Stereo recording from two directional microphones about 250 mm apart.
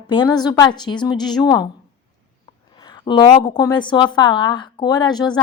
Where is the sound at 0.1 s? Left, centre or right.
Centre.